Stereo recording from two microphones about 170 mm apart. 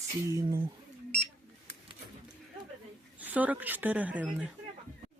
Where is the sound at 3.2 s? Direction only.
10° right (ahead or behind).